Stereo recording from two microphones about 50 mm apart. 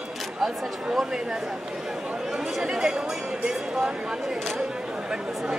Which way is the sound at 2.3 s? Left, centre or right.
Centre.